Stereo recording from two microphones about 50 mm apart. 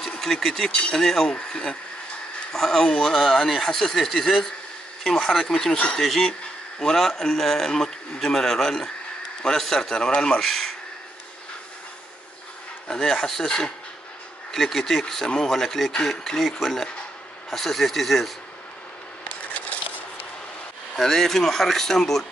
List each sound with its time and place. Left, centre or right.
0.2 s a man's voice: centre
0.7 s speech: left
0.9 s a man's voice: centre
1.3 s a man's voice: centre
12.8 s a man's voice: centre
19.2 s a sound: left
20.9 s a man's voice: centre